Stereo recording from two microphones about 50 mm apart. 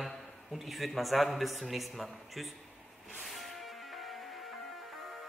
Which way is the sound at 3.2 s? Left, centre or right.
Centre.